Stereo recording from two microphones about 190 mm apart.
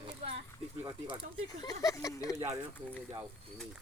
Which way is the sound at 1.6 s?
20° left (ahead or behind).